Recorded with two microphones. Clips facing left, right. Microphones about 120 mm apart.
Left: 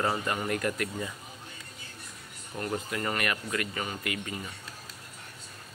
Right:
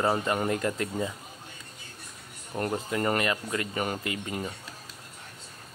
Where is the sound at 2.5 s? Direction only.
30° right (ahead or behind).